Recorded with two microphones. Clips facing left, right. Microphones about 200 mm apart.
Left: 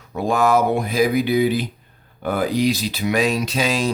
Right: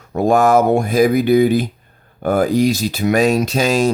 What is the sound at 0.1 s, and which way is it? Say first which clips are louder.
Speech: right 5 dB; 45° right (ahead or behind).